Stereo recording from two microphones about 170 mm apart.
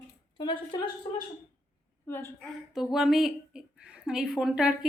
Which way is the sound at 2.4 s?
Centre (ahead or behind).